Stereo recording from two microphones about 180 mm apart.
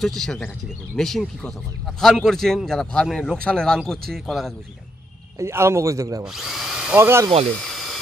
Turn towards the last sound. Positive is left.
turn(degrees=0)  # may be behind; listen again after turning